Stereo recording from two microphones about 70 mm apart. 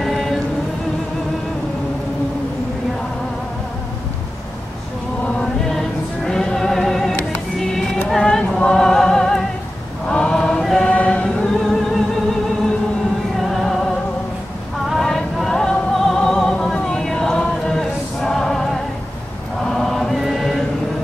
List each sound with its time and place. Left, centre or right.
0.0 s music: centre
5.2 s music: centre
7.5 s a sound: centre
8.1 s a capella: centre
10.0 s choir: centre
10.9 s music: centre
14.9 s music: centre
19.6 s chant: centre